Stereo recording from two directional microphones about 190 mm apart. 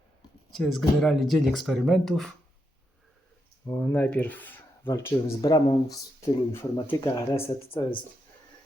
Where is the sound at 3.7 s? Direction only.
15° left (ahead or behind).